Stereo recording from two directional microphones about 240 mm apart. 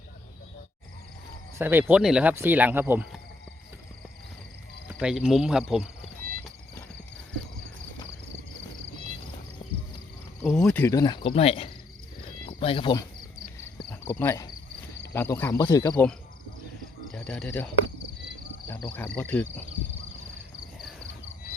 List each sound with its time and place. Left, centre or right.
1.5 s speech: centre
4.9 s cricket: centre
10.4 s cricket: centre; by 11.7 s left
12.5 s speech: left
13.6 s cricket: centre
17.2 s cricket: centre
18.9 s cricket: centre